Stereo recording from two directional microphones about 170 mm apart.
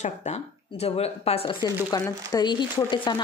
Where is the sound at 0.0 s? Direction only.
40° left (ahead or behind).